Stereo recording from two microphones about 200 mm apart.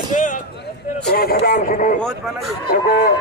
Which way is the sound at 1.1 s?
50° left (ahead or behind).